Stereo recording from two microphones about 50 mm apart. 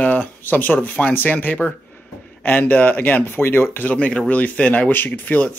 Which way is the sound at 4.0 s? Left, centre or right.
Left.